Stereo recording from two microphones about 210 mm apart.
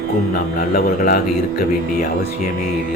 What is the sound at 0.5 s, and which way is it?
Speech, 45° left (ahead or behind).